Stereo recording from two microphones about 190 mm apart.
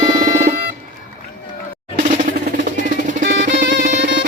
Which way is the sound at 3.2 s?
70° right (ahead or behind).